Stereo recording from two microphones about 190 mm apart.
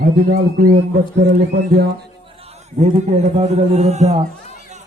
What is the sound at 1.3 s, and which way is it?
Music, 55° right (ahead or behind).